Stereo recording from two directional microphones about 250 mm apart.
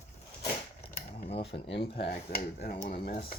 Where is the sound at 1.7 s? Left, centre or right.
Left.